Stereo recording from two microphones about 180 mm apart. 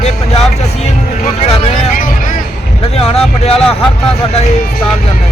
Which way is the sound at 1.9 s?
50° left (ahead or behind).